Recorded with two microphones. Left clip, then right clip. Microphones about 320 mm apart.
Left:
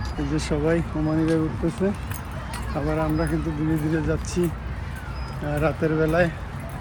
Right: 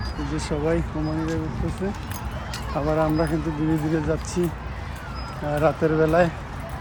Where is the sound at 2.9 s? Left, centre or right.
Centre.